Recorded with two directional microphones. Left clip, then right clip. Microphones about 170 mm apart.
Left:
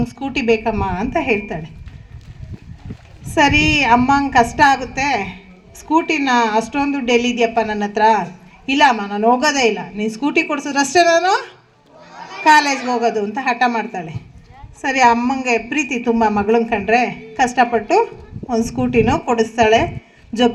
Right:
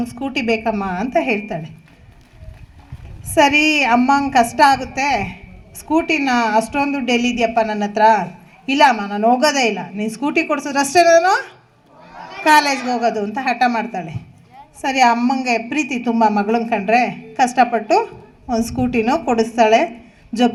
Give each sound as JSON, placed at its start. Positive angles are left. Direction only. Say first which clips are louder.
{"t": 0.0, "sound": "a woman's voice", "louder": "left 1 dB", "side_deg": -45}
{"t": 3.2, "sound": "a woman's voice", "louder": "right 1 dB", "side_deg": -40}